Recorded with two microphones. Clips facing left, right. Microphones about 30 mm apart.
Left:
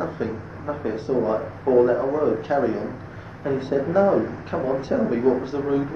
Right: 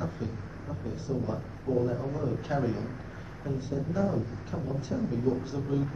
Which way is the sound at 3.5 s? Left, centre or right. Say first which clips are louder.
Left 11 dB; left.